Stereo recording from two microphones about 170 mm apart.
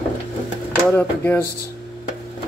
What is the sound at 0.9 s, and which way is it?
Speech, 10° left (ahead or behind).